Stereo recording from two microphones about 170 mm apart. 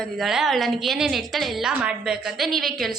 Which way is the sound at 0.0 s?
Centre (ahead or behind).